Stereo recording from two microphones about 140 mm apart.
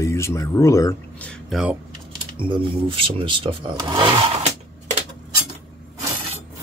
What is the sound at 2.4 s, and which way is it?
Speech, 40° right (ahead or behind).